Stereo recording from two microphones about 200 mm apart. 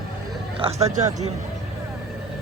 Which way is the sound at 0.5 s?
30° right (ahead or behind).